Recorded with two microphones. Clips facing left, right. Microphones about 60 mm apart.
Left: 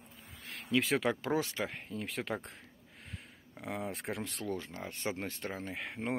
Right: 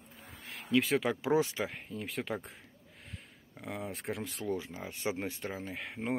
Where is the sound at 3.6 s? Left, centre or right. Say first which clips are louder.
Even; centre.